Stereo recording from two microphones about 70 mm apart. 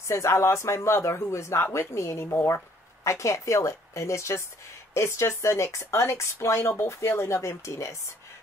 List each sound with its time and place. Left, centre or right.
0.1 s speech: left